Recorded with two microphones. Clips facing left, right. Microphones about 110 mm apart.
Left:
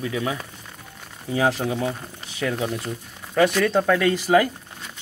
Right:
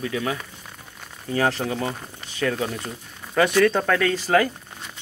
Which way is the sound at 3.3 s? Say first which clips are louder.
Even; centre (ahead or behind).